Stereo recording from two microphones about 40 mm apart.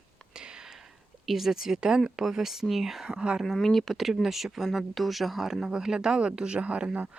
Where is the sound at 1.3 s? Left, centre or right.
Centre.